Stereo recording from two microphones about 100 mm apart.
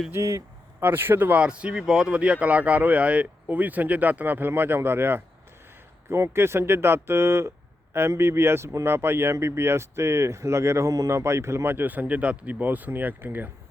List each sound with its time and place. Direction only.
0.1 s speech: 30° right (ahead or behind)